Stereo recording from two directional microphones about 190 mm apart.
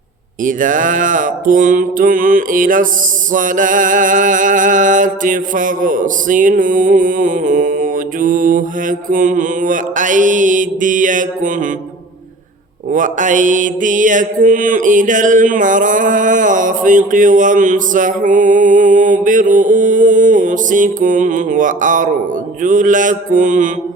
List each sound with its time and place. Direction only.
0.4 s mantra: 45° right (ahead or behind)
12.9 s mantra: 40° right (ahead or behind)